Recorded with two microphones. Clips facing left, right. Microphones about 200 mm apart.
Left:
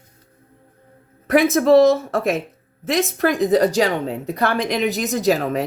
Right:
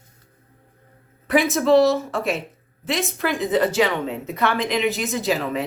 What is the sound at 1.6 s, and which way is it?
Speech, 40° left (ahead or behind).